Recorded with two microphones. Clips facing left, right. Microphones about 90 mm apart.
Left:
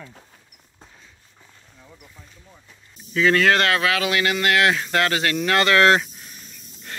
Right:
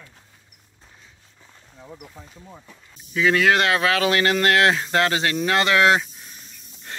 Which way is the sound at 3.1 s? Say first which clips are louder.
Left 1 dB; 10° right (ahead or behind).